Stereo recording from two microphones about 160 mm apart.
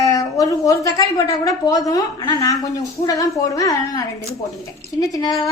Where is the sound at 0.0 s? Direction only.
20° left (ahead or behind).